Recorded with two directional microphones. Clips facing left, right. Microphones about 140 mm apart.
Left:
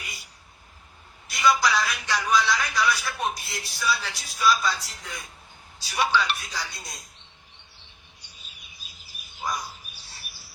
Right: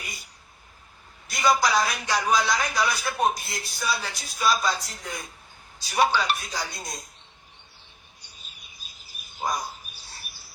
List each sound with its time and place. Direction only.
0.0 s a sound: 45° right (ahead or behind)
1.3 s a man's voice: 45° right (ahead or behind)
9.3 s bird: 45° right (ahead or behind)